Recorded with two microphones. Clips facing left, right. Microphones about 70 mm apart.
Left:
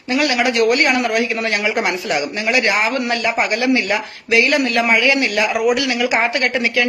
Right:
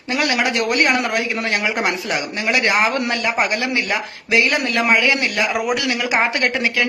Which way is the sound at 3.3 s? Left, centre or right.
Centre.